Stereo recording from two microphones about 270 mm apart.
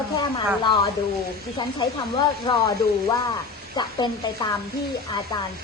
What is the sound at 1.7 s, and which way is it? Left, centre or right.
Speech, centre.